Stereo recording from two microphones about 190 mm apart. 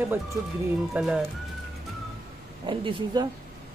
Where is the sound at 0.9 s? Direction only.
5° right (ahead or behind).